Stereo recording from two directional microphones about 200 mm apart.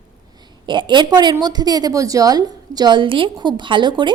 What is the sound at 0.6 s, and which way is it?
A woman's voice, 25° right (ahead or behind).